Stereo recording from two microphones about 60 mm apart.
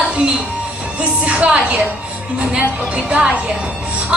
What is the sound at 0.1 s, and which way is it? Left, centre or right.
Music, centre.